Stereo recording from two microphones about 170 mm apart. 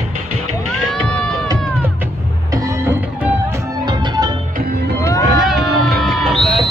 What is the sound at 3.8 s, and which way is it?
Music, 25° right (ahead or behind).